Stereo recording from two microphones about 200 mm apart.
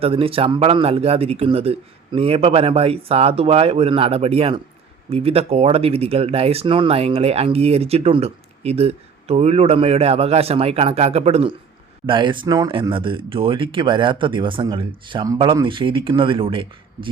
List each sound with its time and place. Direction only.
0.0 s speech: 30° right (ahead or behind)